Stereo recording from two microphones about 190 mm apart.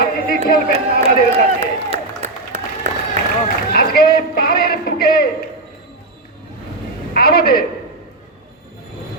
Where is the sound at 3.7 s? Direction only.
50° left (ahead or behind).